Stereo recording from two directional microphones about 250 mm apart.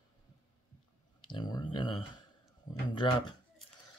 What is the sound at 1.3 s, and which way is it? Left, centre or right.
Speech, centre.